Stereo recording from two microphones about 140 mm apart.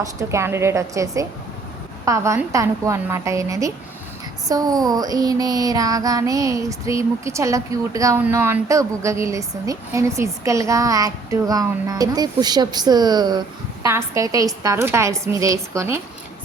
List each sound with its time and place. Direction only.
0.0 s female singing: 20° right (ahead or behind)